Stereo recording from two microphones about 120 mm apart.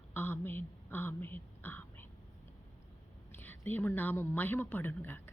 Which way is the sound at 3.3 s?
15° left (ahead or behind).